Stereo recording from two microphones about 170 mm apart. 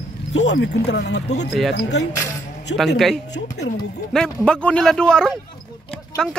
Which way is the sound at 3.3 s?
80° left.